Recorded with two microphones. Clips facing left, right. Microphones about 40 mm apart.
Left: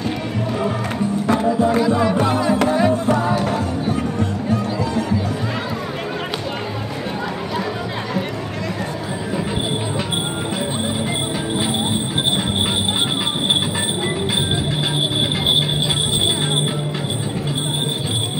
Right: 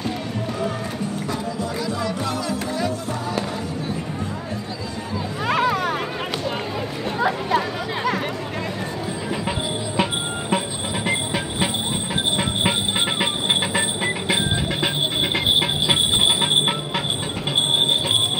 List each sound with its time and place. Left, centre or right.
1.2 s music: left
1.8 s music: left